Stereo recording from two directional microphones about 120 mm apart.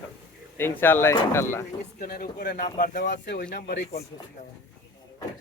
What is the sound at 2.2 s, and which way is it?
Speech, 90° left.